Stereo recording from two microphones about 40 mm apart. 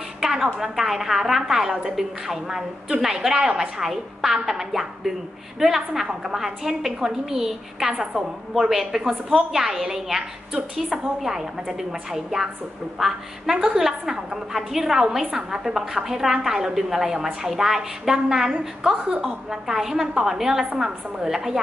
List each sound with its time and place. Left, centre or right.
0.2 s a woman's voice: centre
18.6 s a woman's voice: right